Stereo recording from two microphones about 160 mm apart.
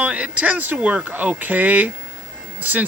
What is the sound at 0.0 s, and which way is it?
Speech, 10° right (ahead or behind).